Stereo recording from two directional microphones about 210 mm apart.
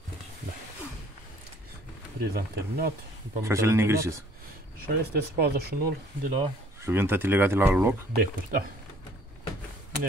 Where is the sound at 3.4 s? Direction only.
15° right (ahead or behind).